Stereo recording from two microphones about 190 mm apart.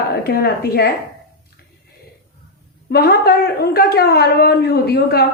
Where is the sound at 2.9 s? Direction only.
55° left (ahead or behind).